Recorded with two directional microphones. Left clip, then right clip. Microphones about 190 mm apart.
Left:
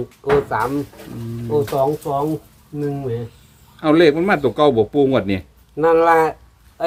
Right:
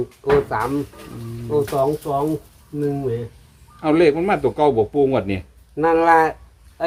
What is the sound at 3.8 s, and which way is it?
Speech, 30° left (ahead or behind).